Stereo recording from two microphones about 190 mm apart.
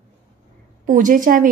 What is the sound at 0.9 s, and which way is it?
Speech, 45° right (ahead or behind).